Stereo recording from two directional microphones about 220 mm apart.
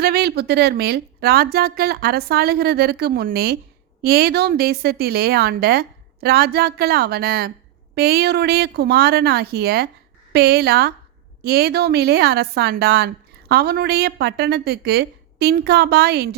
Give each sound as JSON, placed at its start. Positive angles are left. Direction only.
{"t": 0.0, "sound": "a woman's voice", "side_deg": -45}